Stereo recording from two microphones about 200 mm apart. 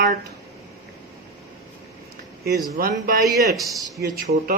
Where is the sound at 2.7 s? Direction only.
45° right (ahead or behind).